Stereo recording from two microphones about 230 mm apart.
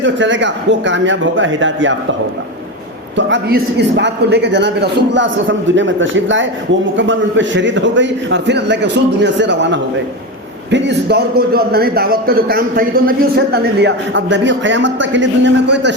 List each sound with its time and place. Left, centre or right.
0.0 s a man's voice: right
3.2 s a man's voice: right